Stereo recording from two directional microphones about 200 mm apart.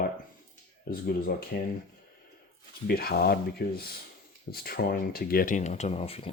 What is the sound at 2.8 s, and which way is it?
Speech, 50° left (ahead or behind).